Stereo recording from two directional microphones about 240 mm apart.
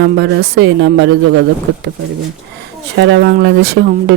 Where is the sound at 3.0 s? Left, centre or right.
Right.